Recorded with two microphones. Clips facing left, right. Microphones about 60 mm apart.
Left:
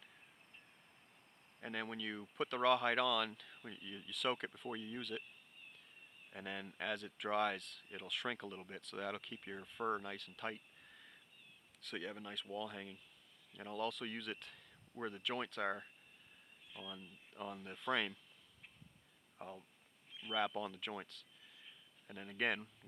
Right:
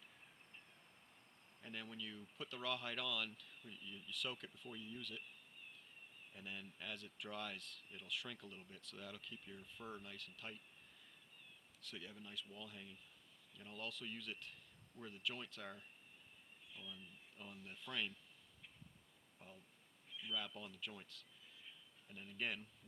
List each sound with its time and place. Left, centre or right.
1.6 s speech: left
6.3 s speech: left
7.9 s speech: left
11.8 s speech: left
16.8 s speech: left
19.4 s speech: left